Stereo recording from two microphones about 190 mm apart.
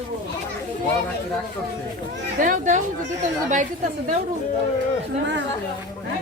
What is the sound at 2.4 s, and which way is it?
Speech, 40° right (ahead or behind).